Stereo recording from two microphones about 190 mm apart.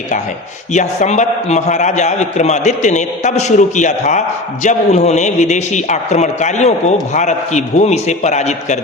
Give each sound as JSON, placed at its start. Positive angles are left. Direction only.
{"t": 0.7, "sound": "a man's voice", "side_deg": 40}